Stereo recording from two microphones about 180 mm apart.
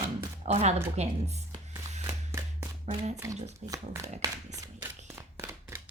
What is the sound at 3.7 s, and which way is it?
Speech, 15° right (ahead or behind).